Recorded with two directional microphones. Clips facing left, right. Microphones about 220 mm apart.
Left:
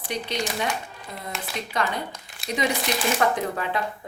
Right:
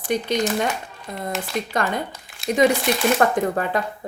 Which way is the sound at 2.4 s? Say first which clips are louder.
Right 6 dB; centre (ahead or behind).